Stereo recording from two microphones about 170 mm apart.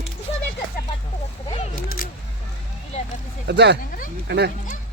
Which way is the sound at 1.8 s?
55° left (ahead or behind).